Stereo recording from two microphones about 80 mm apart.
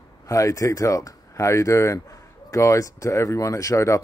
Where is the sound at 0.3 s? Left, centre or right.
Left.